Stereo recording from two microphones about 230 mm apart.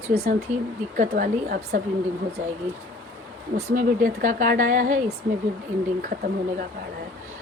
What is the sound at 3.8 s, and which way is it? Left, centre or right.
Speech, right.